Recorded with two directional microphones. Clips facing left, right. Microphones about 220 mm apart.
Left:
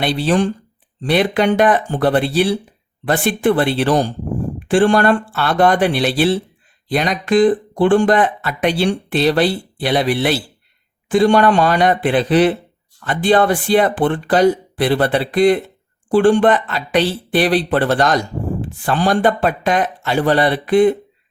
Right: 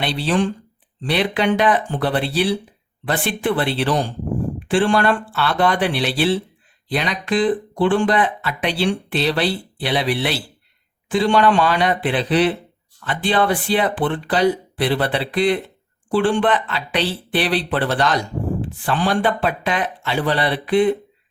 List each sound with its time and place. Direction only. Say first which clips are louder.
0.0 s speech: left 4 dB; 45° left (ahead or behind)